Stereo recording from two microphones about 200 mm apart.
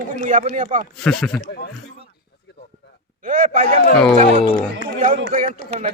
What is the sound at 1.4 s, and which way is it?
Speech, 50° left (ahead or behind).